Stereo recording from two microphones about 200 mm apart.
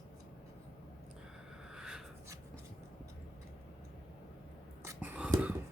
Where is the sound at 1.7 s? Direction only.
5° right (ahead or behind).